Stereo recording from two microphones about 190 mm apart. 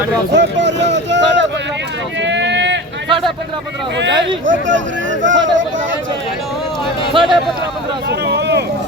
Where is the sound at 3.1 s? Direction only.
25° right (ahead or behind).